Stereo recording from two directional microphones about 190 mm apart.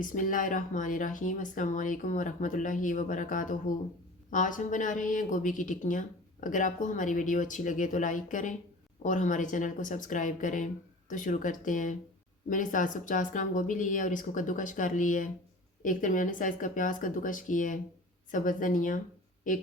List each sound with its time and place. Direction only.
0.0 s speech: 45° left (ahead or behind)